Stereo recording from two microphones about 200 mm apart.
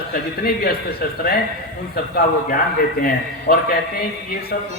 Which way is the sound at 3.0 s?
50° left (ahead or behind).